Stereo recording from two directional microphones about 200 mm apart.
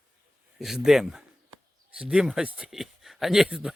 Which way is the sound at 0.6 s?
Centre (ahead or behind).